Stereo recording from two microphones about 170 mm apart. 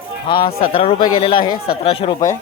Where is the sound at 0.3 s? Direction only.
30° left (ahead or behind).